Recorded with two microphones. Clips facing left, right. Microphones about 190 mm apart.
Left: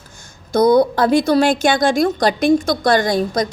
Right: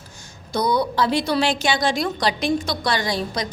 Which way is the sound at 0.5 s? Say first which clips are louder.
Left 8 dB; 50° left (ahead or behind).